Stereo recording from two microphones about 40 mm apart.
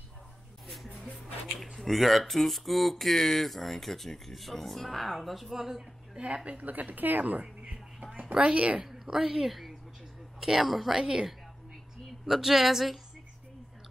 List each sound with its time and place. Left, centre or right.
1.8 s speech: centre
6.1 s a woman's voice: right
6.6 s a woman's voice: right
7.7 s music: centre
8.5 s a woman's voice: right
8.8 s a woman's voice: centre
11.0 s a woman's voice: centre
12.3 s speech: centre